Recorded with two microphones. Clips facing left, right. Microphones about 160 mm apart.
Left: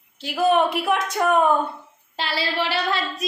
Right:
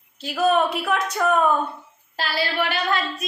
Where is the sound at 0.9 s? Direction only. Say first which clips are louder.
Left 1 dB; 15° left (ahead or behind).